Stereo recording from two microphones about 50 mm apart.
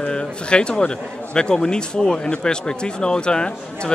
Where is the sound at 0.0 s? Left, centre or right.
Centre.